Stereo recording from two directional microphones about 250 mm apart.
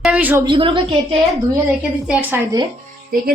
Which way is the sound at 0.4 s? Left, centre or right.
Centre.